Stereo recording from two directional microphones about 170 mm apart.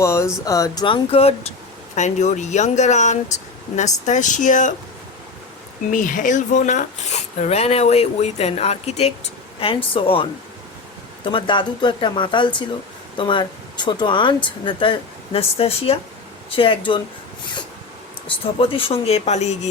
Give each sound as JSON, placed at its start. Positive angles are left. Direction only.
{"t": 0.0, "sound": "speech", "side_deg": 15}
{"t": 5.9, "sound": "speech", "side_deg": 50}
{"t": 11.3, "sound": "speech", "side_deg": 30}
{"t": 18.3, "sound": "speech", "side_deg": 30}